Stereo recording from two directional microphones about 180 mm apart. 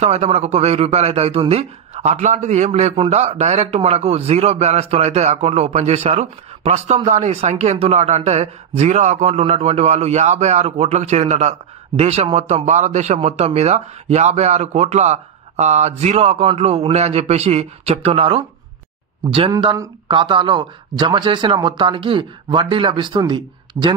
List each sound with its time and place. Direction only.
0.0 s speech: 35° right (ahead or behind)
19.5 s speech: 25° right (ahead or behind)